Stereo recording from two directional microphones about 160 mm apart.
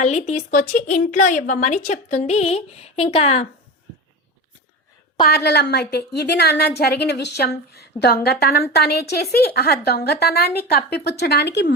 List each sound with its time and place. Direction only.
0.0 s a woman's voice: 45° left (ahead or behind)
5.2 s a woman's voice: 90° left; by 8.6 s 75° left (ahead or behind)
8.7 s a woman's voice: 85° left